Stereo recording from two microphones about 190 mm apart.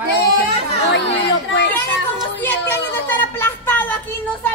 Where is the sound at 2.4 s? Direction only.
10° left (ahead or behind).